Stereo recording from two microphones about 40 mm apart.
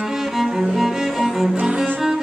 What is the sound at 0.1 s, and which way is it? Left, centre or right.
Cello, centre.